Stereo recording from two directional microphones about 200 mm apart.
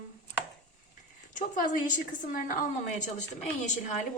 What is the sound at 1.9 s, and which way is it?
A woman's voice, 45° left (ahead or behind).